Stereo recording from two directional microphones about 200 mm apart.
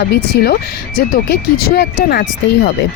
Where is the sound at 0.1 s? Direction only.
50° left (ahead or behind).